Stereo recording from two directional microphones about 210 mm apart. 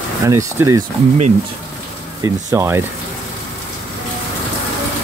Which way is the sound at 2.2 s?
15° right (ahead or behind).